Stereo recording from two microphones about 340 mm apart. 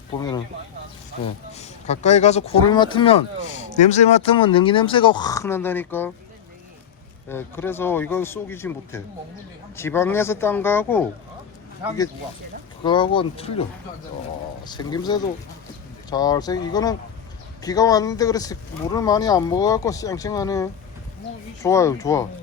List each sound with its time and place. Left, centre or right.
0.2 s speech: centre
1.5 s speech: centre
7.3 s speech: centre
12.8 s speech: centre